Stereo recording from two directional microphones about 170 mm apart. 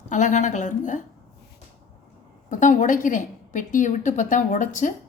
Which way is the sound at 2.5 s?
50° left (ahead or behind).